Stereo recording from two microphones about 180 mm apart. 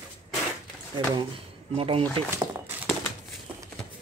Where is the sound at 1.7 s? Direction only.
30° right (ahead or behind).